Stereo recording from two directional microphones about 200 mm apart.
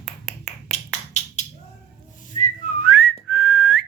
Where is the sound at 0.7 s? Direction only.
35° left (ahead or behind).